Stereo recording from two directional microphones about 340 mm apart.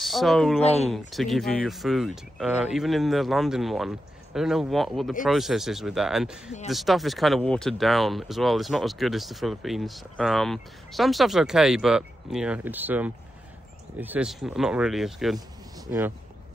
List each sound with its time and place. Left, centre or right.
0.0 s speech: centre
0.6 s speech: centre
0.9 s speech: centre